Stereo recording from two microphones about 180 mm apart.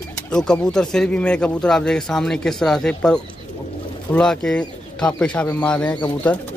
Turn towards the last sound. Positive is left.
turn(degrees=10)  # may be behind; listen again after turning